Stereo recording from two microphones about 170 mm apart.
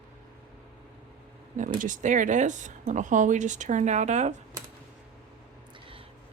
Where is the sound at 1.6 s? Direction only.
50° right (ahead or behind).